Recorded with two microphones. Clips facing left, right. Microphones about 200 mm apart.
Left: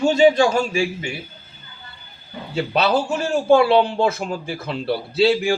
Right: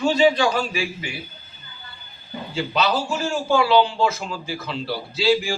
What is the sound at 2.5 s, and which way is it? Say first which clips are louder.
Speech: left 3 dB; 60° left (ahead or behind).